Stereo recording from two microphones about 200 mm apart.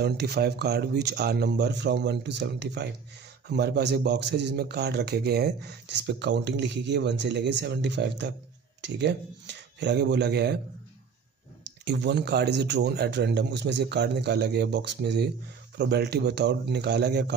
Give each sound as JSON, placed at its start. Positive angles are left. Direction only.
{"t": 0.0, "sound": "a man's voice", "side_deg": -55}
{"t": 11.8, "sound": "a man's voice", "side_deg": -60}